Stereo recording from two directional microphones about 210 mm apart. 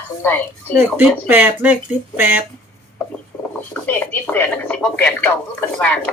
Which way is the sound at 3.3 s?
5° left (ahead or behind).